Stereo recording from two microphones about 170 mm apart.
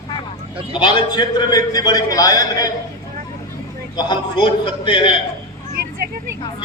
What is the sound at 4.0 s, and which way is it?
A man's voice, 25° left (ahead or behind).